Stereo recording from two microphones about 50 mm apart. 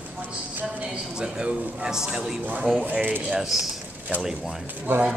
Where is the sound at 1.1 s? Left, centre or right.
Centre.